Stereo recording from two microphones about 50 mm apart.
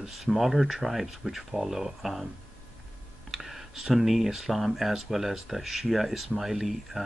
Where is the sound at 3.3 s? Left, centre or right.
Centre.